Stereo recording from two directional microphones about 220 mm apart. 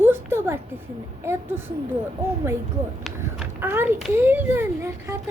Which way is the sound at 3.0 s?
5° right (ahead or behind).